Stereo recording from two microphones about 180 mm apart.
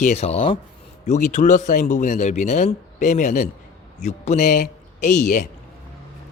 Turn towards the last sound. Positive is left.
turn(degrees=45)  # may be behind; listen again after turning